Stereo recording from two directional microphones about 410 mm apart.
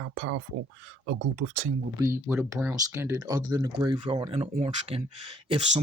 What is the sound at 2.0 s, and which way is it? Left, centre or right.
Speech, centre.